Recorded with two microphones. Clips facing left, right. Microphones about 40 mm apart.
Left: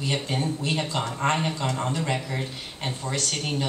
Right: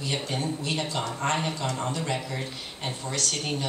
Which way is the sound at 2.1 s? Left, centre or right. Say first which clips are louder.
Left 2 dB; centre.